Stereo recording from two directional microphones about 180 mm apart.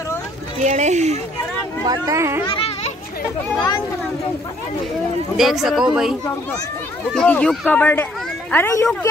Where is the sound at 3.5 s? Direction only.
20° left (ahead or behind).